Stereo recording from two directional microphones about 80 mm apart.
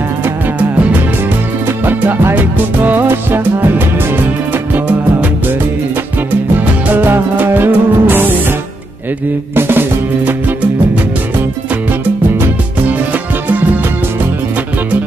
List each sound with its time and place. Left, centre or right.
1.9 s music: right
6.9 s music: right
9.6 s music: right